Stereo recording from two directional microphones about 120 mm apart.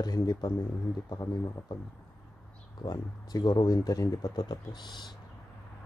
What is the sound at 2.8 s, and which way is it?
Speech, 35° left (ahead or behind).